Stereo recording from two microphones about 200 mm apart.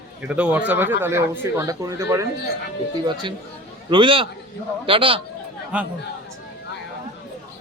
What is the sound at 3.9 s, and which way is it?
Speech, 25° right (ahead or behind).